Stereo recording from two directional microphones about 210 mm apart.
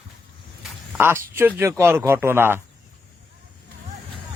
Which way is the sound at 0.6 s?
10° right (ahead or behind).